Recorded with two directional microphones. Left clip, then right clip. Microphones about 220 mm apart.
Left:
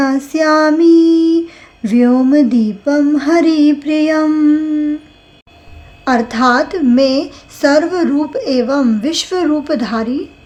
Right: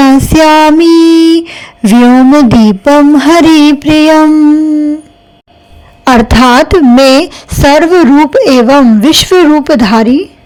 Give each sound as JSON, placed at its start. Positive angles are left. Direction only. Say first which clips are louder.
{"t": 0.0, "sound": "female singing", "louder": "right 9 dB", "side_deg": -35}
{"t": 0.9, "sound": "a sound", "louder": "right 6 dB", "side_deg": -30}
{"t": 6.1, "sound": "speech", "louder": "right 8 dB", "side_deg": -40}